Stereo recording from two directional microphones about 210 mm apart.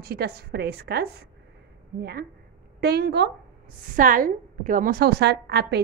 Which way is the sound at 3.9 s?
40° right (ahead or behind).